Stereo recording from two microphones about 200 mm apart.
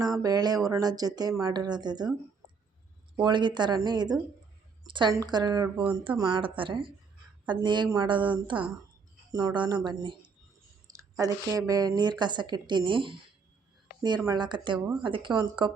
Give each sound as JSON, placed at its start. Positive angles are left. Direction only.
{"t": 0.2, "sound": "a woman's voice", "side_deg": -20}
{"t": 3.2, "sound": "a woman's voice", "side_deg": -25}